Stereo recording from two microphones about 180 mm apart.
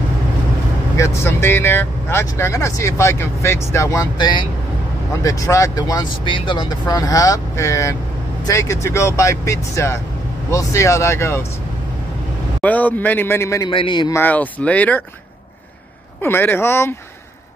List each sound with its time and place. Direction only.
0.9 s speech: 15° left (ahead or behind)
12.6 s speech: 10° left (ahead or behind)
13.7 s speech: 25° left (ahead or behind)
14.2 s speech: 10° left (ahead or behind)
16.2 s speech: 10° left (ahead or behind)